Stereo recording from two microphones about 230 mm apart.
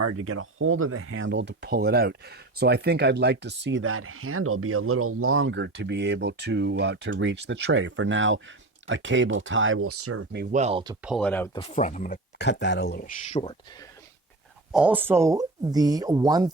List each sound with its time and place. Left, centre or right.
0.0 s speech: right
10.3 s speech: right
10.6 s speech: right
11.0 s speech: centre
11.5 s speech: left
12.5 s speech: left
14.7 s speech: centre